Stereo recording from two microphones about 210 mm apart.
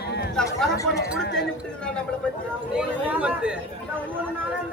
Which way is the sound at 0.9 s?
55° left (ahead or behind).